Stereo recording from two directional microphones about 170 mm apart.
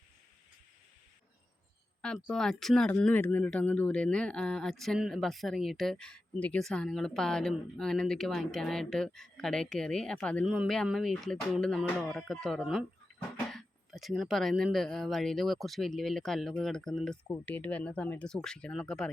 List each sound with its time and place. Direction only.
2.0 s speech: 5° left (ahead or behind)